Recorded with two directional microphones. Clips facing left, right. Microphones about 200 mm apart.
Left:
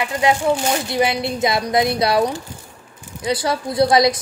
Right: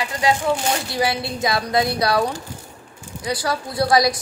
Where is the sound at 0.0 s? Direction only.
20° left (ahead or behind).